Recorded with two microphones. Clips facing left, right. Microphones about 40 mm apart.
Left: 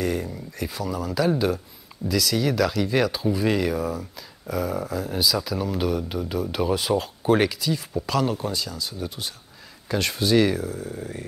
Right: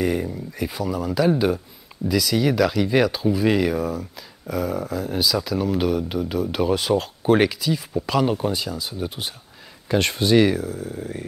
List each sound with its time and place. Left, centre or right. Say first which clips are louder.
0.0 s speech: right 3 dB; centre
10.5 s speech: right 2 dB; centre